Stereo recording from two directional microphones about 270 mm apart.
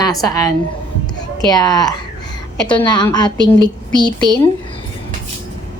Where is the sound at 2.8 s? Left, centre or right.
Centre.